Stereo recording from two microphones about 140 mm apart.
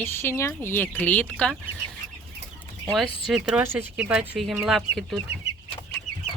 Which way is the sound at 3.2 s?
5° right (ahead or behind).